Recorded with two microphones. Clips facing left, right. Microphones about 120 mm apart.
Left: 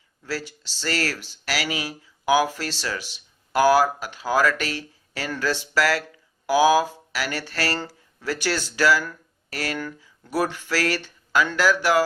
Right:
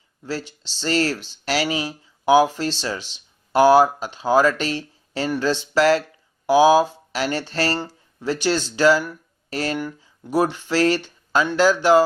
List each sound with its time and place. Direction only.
0.3 s speech: 20° right (ahead or behind)